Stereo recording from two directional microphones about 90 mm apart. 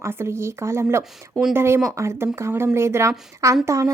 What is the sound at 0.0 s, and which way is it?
A woman's voice, 30° right (ahead or behind).